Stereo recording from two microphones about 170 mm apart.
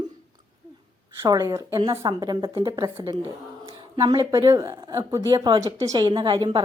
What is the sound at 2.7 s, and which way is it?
Speech, 20° right (ahead or behind).